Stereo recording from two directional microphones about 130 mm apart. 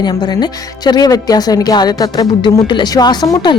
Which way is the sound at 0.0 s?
35° left (ahead or behind).